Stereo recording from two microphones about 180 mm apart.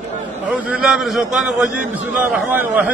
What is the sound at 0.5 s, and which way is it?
A man's voice, 5° right (ahead or behind).